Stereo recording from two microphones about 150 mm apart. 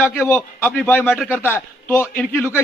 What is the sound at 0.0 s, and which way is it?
A man's voice, 15° left (ahead or behind).